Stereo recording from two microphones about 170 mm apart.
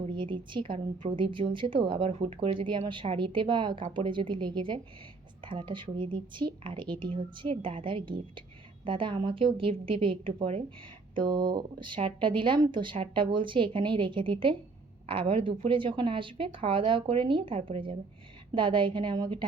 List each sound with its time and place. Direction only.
0.0 s a woman's voice: 30° right (ahead or behind)